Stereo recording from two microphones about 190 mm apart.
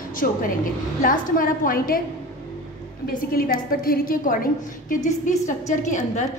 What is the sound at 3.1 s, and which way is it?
A woman's voice, 50° left (ahead or behind).